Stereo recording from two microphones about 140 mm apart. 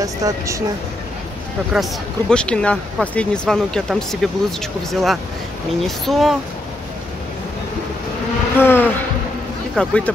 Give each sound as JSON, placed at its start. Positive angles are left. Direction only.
{"t": 0.0, "sound": "speech", "side_deg": -25}
{"t": 1.7, "sound": "speech", "side_deg": 0}
{"t": 8.5, "sound": "insect", "side_deg": 15}
{"t": 9.8, "sound": "speech", "side_deg": 10}